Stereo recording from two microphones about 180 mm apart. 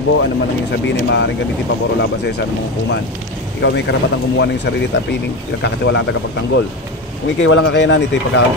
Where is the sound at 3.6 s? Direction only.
75° left (ahead or behind).